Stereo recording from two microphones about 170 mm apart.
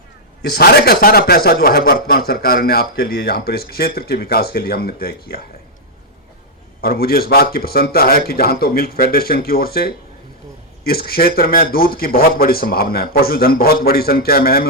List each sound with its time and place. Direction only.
0.4 s a man's voice: 70° left (ahead or behind)
6.8 s a man's voice: 60° left (ahead or behind)